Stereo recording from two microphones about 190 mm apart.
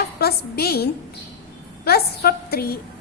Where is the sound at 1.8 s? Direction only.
55° left (ahead or behind).